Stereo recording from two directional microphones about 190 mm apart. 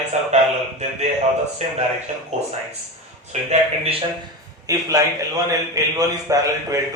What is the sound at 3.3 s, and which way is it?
Speech, 35° right (ahead or behind).